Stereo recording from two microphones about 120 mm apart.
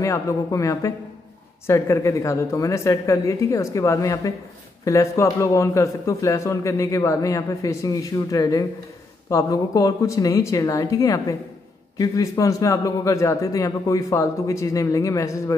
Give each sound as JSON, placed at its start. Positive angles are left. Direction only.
{"t": 0.0, "sound": "a man's voice", "side_deg": 25}